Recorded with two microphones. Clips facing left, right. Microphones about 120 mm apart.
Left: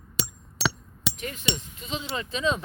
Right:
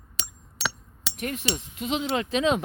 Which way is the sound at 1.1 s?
60° right (ahead or behind).